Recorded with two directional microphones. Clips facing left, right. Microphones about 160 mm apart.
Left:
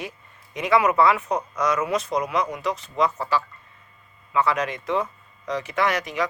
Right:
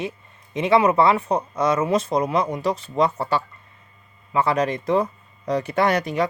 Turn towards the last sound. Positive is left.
turn(degrees=-35)  # may be behind; listen again after turning